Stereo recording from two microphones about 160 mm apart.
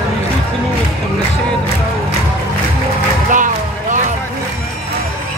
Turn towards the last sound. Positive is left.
turn(degrees=-55)  # may be behind; listen again after turning